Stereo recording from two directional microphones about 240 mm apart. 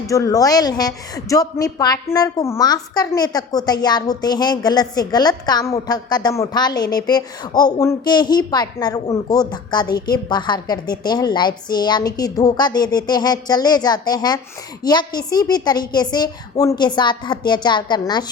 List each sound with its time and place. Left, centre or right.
0.1 s speech: centre